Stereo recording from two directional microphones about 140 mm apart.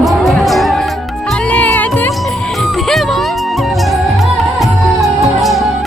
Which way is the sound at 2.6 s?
Centre (ahead or behind).